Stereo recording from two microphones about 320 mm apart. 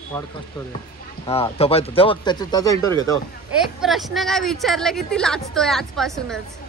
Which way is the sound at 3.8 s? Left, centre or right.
Centre.